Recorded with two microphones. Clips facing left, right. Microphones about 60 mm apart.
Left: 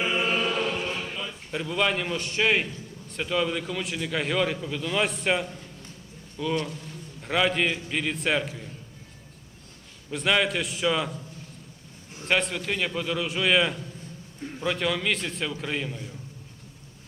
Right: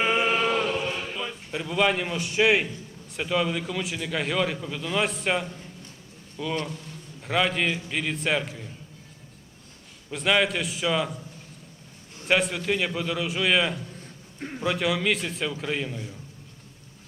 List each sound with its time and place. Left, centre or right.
0.0 s chant: right
0.8 s a sound: centre
3.1 s a man's voice: centre
10.1 s a man's voice: centre
12.3 s a man's voice: centre